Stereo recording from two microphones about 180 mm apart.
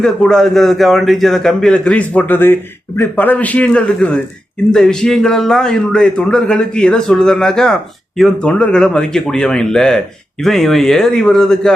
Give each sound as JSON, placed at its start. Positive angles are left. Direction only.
{"t": 0.0, "sound": "a man's voice", "side_deg": 0}